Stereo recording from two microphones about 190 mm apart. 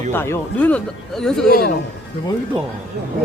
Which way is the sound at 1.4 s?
50° left (ahead or behind).